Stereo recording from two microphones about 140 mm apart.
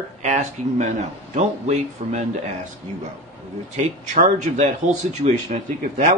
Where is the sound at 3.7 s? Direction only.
60° right (ahead or behind).